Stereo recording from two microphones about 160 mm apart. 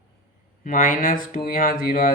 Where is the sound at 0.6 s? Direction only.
60° left (ahead or behind).